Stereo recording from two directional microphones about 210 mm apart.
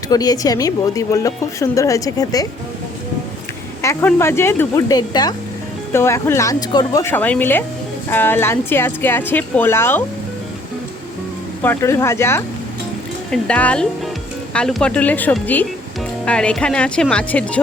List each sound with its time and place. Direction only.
0.1 s a woman's voice: 20° left (ahead or behind)
3.8 s a woman's voice: 10° left (ahead or behind)
11.6 s a woman's voice: 10° left (ahead or behind)